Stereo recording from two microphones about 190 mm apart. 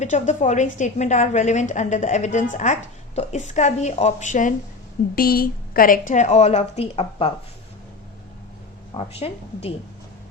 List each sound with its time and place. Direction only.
0.0 s a woman's voice: 40° left (ahead or behind)
5.1 s a woman's voice: 50° left (ahead or behind); by 7.3 s 30° left (ahead or behind)
8.9 s a woman's voice: 30° left (ahead or behind)